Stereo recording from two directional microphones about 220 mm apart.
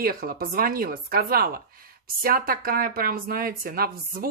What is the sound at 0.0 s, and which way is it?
Speech, 40° right (ahead or behind).